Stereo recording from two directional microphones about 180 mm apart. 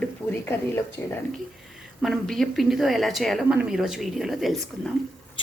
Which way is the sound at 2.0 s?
Centre (ahead or behind).